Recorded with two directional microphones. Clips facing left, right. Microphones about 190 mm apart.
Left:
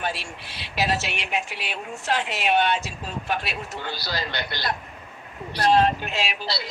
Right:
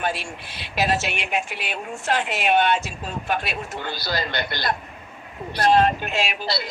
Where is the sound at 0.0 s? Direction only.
50° right (ahead or behind).